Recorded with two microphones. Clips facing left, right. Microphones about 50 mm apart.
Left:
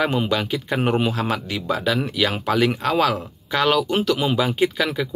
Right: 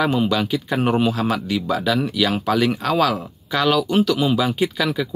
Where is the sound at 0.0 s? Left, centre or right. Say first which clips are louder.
Right 2 dB; left.